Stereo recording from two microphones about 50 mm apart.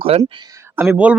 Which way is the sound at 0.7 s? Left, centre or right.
Right.